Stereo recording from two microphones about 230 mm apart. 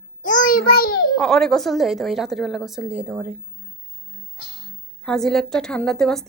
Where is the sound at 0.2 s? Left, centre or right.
Left.